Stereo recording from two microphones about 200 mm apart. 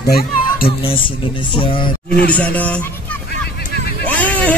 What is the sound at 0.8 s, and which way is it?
Speech, 25° left (ahead or behind).